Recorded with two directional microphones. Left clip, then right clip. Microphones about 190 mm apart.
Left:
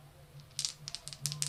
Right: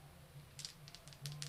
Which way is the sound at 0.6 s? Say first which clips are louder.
Left 13 dB; 30° left (ahead or behind).